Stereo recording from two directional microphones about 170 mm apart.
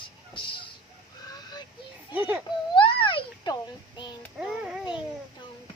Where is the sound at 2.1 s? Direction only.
10° right (ahead or behind).